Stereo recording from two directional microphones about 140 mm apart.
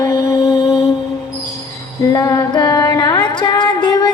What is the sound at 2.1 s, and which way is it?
Music, 25° left (ahead or behind).